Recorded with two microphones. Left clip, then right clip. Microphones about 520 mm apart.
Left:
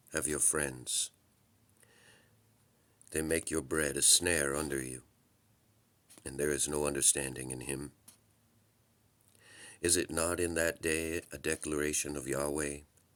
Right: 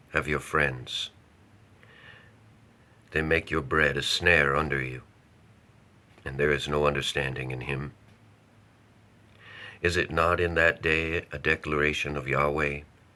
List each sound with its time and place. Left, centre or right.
0.1 s speech: left
3.1 s speech: left
6.2 s speech: left
9.4 s speech: left